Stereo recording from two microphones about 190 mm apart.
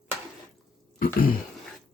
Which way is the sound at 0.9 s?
50° left (ahead or behind).